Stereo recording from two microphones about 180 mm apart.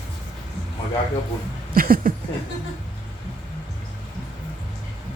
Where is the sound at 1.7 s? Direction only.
55° right (ahead or behind).